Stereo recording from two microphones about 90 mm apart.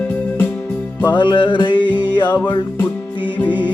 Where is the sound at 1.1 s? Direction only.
60° left (ahead or behind).